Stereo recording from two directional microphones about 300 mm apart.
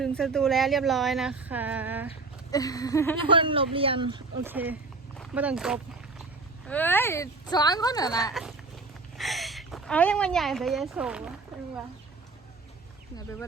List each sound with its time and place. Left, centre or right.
0.0 s speech: centre
2.5 s speech: centre
3.2 s speech: centre
8.3 s a woman's voice: centre